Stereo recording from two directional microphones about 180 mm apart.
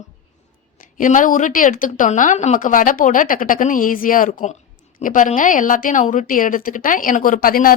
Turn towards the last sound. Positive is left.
turn(degrees=50)  # may be behind; listen again after turning